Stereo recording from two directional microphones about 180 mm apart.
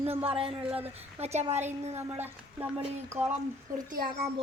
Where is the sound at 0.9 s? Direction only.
35° right (ahead or behind).